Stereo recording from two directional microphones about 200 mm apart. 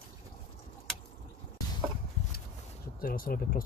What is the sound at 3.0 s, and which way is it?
Speech, 45° left (ahead or behind).